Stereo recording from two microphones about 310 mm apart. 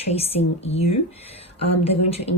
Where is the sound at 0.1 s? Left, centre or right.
Centre.